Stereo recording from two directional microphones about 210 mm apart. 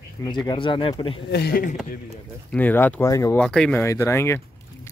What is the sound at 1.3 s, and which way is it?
Speech, 50° left (ahead or behind).